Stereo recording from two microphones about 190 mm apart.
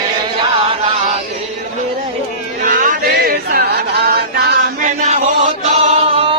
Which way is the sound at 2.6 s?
45° right (ahead or behind).